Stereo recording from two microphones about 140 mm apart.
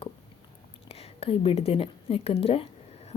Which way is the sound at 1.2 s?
45° left (ahead or behind).